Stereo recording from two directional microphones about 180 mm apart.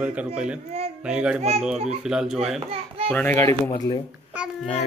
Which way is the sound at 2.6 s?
30° right (ahead or behind).